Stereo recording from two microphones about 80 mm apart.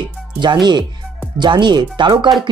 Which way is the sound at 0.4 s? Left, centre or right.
Right.